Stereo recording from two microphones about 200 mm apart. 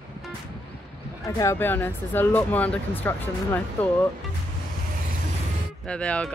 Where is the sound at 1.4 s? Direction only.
10° left (ahead or behind).